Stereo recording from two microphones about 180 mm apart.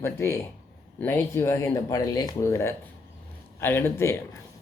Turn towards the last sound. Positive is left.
turn(degrees=15)  # may be behind; listen again after turning